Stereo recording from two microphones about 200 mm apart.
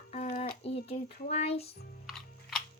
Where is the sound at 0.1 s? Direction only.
35° left (ahead or behind).